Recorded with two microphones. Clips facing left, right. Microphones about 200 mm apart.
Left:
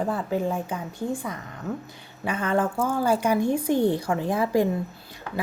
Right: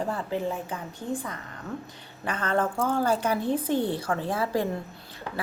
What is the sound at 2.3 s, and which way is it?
A woman's voice, 10° left (ahead or behind).